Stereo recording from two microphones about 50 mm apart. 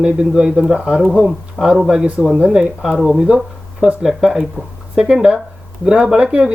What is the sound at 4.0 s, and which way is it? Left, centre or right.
A man's voice, centre.